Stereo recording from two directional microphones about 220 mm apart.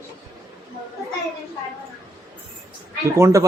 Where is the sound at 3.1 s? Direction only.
15° right (ahead or behind).